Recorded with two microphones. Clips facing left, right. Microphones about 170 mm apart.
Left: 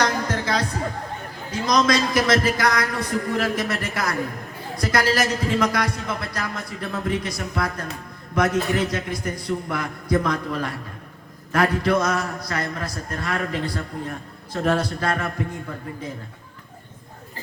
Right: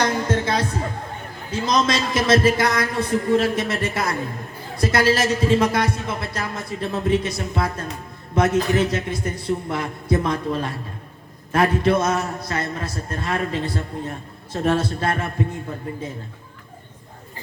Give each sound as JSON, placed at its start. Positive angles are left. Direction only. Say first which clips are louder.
{"t": 0.0, "sound": "music", "louder": "right 2 dB", "side_deg": -25}
{"t": 1.5, "sound": "a man's voice", "louder": "left 1 dB", "side_deg": -25}